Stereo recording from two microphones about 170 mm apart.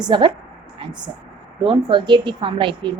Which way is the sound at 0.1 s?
30° right (ahead or behind).